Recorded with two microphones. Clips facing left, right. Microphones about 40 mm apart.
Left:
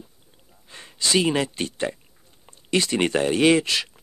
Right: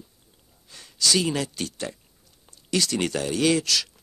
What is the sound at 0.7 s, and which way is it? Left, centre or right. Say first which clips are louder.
Speech: right 1 dB; left.